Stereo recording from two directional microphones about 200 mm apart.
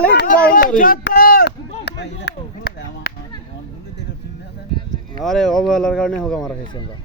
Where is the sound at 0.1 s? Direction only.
55° left (ahead or behind).